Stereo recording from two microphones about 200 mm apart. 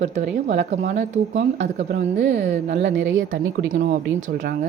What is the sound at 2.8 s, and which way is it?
Speech, 70° right (ahead or behind).